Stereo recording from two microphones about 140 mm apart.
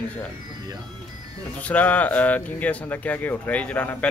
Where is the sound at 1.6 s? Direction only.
10° left (ahead or behind).